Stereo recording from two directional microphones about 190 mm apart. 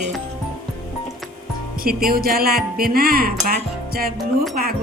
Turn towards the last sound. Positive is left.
turn(degrees=-50)  # may be behind; listen again after turning